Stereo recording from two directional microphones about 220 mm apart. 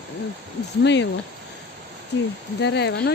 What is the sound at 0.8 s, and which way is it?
Speech, 55° left (ahead or behind).